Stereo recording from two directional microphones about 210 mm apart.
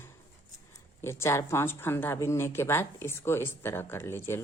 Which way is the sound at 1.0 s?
10° left (ahead or behind).